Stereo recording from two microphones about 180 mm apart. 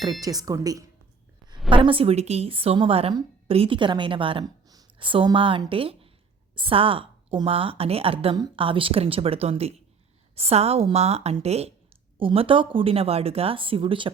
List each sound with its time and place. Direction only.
0.0 s a woman's voice: 20° right (ahead or behind)